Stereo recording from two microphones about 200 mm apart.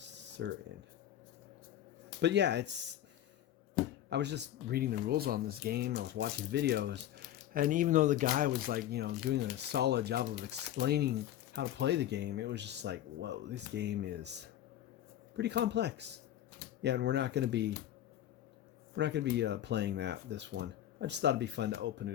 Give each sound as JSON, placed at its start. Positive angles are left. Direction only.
{"t": 0.4, "sound": "speech", "side_deg": -60}
{"t": 2.2, "sound": "speech", "side_deg": -60}
{"t": 4.1, "sound": "speech", "side_deg": -60}
{"t": 7.5, "sound": "speech", "side_deg": -45}
{"t": 18.9, "sound": "speech", "side_deg": -60}